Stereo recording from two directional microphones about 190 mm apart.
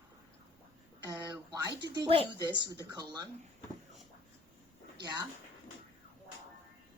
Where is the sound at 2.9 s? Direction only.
20° right (ahead or behind).